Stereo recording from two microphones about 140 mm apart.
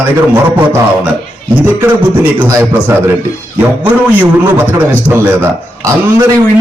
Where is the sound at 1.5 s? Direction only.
15° right (ahead or behind).